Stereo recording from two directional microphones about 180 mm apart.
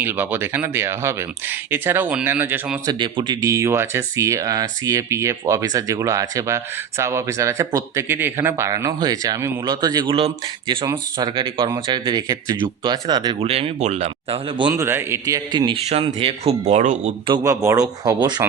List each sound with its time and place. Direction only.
0.0 s speech: 10° right (ahead or behind)
3.0 s speech: 25° right (ahead or behind)
14.7 s speech: 15° right (ahead or behind); by 17.2 s 40° right (ahead or behind)
17.2 s speech: 20° right (ahead or behind)